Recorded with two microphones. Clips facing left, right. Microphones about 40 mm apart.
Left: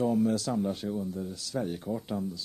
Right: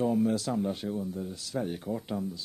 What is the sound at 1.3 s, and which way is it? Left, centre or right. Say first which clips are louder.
Speech: even; right.